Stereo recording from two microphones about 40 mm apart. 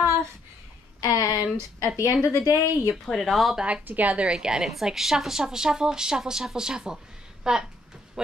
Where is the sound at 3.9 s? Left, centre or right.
Right.